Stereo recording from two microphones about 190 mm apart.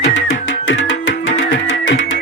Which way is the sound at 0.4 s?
90° left.